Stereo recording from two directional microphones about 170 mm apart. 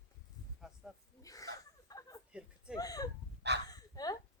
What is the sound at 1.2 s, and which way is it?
Speech, 20° left (ahead or behind).